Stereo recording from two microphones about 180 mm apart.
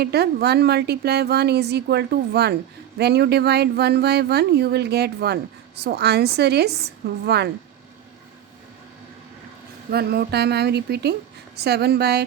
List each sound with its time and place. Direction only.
0.0 s speech: 65° right (ahead or behind)
9.9 s speech: 60° right (ahead or behind)